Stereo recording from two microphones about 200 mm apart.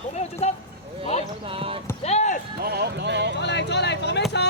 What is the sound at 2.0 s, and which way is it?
Basketball bounce, 35° left (ahead or behind).